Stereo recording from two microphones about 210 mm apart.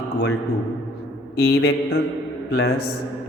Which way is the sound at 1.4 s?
50° left (ahead or behind).